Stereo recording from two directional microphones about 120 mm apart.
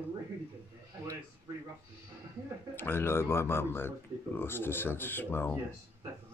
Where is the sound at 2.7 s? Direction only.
20° left (ahead or behind).